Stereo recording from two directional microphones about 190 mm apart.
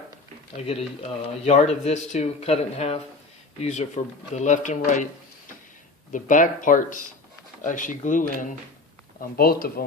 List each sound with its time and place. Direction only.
0.5 s speech: 35° left (ahead or behind)
6.1 s speech: 45° left (ahead or behind)
9.3 s speech: 50° left (ahead or behind)